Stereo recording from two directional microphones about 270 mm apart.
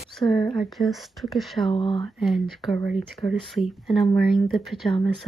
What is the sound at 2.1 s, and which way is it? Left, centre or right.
Speech, centre.